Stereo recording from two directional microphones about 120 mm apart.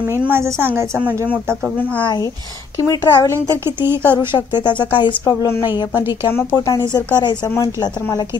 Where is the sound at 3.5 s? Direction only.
20° right (ahead or behind).